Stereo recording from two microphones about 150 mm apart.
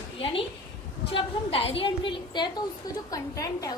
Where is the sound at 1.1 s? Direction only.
40° left (ahead or behind).